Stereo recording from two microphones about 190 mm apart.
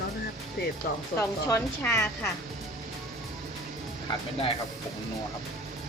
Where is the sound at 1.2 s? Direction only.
10° left (ahead or behind).